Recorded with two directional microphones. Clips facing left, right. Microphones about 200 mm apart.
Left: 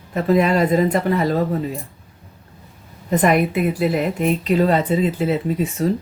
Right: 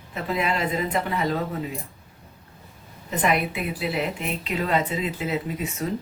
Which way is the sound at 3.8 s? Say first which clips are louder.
Left 6 dB; 45° left (ahead or behind).